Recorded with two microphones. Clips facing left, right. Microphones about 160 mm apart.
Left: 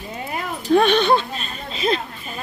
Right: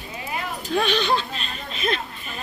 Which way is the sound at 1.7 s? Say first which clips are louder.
Left 5 dB; 30° left (ahead or behind).